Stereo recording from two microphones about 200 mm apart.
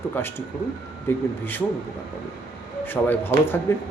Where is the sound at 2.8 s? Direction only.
10° left (ahead or behind).